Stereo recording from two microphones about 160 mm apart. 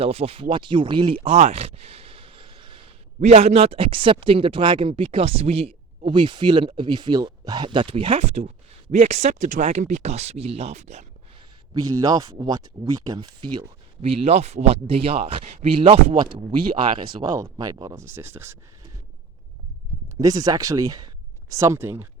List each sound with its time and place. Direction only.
0.0 s speech: 40° right (ahead or behind)
3.2 s speech: 45° right (ahead or behind)
11.7 s speech: 25° right (ahead or behind)
17.2 s speech: 20° right (ahead or behind)
20.1 s speech: 20° right (ahead or behind)